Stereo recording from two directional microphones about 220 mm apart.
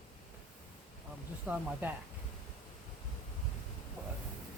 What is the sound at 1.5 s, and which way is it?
Speech, 5° right (ahead or behind).